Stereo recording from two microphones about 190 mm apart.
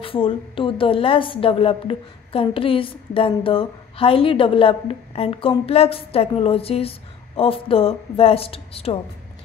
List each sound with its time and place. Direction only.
0.0 s a woman's voice: 30° left (ahead or behind)